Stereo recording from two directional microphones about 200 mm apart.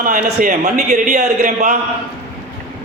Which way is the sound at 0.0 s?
45° right (ahead or behind).